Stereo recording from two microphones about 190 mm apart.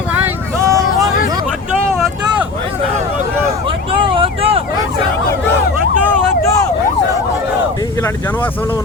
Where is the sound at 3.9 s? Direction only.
25° right (ahead or behind).